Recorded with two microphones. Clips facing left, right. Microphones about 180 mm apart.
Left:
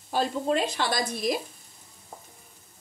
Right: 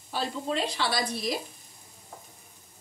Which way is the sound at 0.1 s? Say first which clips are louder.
Left 5 dB; 45° left (ahead or behind).